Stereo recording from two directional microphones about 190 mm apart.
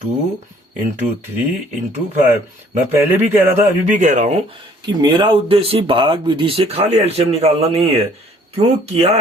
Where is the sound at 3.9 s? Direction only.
40° right (ahead or behind).